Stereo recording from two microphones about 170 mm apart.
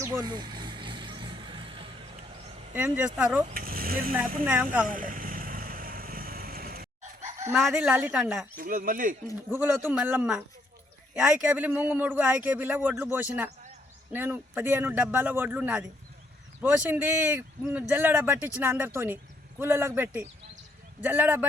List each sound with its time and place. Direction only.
0.0 s vehicle: 20° right (ahead or behind)
2.7 s a man's voice: 10° right (ahead or behind)
3.5 s speech: 60° right (ahead or behind)
4.4 s a man's voice: 5° right (ahead or behind)
4.9 s vehicle: 55° right (ahead or behind)
7.3 s chicken: 15° right (ahead or behind)
7.6 s a woman's voice: 5° right (ahead or behind)
8.5 s speech: 55° right (ahead or behind)
9.5 s a man's voice: 10° right (ahead or behind)